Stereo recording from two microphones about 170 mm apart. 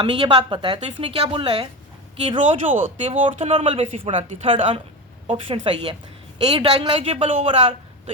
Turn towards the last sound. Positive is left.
turn(degrees=-35)  # may be behind; listen again after turning